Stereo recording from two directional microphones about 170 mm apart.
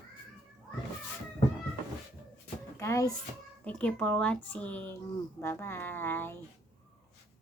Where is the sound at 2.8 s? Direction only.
20° left (ahead or behind).